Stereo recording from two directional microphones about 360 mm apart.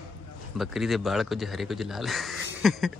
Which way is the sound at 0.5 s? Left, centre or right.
Centre.